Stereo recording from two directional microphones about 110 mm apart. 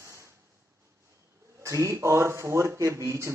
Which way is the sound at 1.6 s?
25° right (ahead or behind).